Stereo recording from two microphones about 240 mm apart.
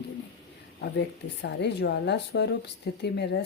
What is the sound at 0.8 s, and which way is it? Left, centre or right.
Speech, left.